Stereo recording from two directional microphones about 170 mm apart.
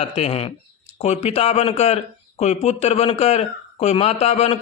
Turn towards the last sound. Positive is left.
turn(degrees=35)  # may be behind; listen again after turning